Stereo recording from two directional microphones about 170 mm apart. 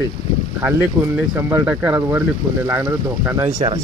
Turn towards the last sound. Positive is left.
turn(degrees=-15)  # may be behind; listen again after turning